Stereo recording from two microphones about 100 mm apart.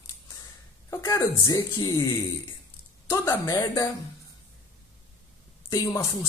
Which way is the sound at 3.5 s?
35° left (ahead or behind).